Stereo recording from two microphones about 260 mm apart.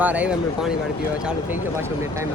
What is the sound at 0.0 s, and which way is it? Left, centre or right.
Speech, centre.